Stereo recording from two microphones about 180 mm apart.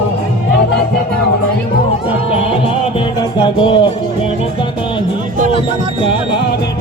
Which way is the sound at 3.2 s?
25° left (ahead or behind).